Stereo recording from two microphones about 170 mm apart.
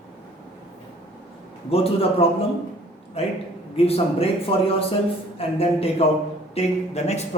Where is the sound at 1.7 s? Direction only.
35° left (ahead or behind).